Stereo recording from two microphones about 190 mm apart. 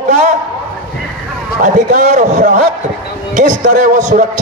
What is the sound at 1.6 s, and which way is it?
A man's voice, 45° right (ahead or behind).